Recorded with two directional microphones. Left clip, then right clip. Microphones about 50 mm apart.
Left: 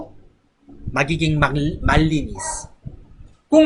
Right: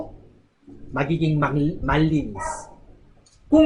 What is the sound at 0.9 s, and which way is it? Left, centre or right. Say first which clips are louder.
Speech: left 4 dB; left.